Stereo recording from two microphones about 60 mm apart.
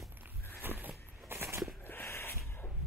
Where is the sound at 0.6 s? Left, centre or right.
Right.